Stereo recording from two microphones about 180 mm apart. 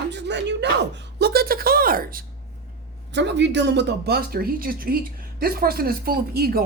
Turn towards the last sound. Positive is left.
turn(degrees=-55)  # may be behind; listen again after turning